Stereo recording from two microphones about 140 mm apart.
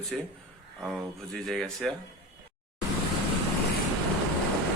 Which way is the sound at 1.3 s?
5° left (ahead or behind).